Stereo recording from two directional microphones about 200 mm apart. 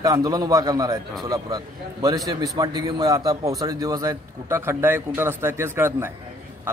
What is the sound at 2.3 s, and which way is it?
A man's voice, 20° right (ahead or behind).